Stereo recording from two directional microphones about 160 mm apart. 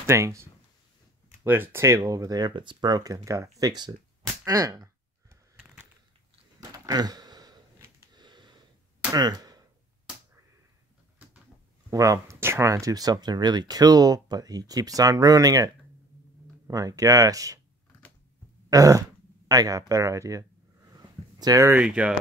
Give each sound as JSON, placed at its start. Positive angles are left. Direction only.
{"t": 0.0, "sound": "speech", "side_deg": -15}
{"t": 5.3, "sound": "a sound", "side_deg": -15}
{"t": 6.6, "sound": "a sound", "side_deg": -25}
{"t": 8.0, "sound": "sniff", "side_deg": -25}
{"t": 9.1, "sound": "speech", "side_deg": -25}
{"t": 11.9, "sound": "speech", "side_deg": -20}
{"t": 18.7, "sound": "speech", "side_deg": -20}